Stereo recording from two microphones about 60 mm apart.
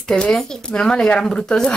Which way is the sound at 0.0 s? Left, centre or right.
Centre.